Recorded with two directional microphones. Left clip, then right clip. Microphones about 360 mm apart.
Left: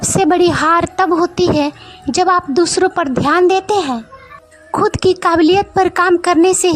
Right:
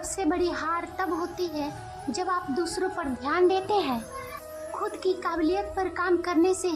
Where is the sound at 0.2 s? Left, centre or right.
Left.